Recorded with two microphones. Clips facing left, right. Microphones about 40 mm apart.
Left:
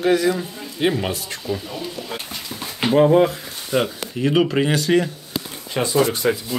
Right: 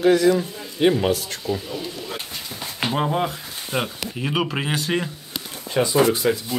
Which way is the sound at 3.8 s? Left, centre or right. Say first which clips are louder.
Left 5 dB; centre.